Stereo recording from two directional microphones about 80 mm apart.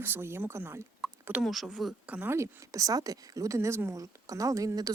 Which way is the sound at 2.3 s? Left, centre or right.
Right.